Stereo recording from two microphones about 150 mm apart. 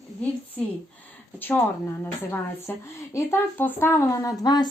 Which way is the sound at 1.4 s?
15° left (ahead or behind).